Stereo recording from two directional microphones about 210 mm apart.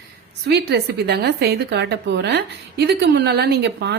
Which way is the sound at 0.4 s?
50° right (ahead or behind).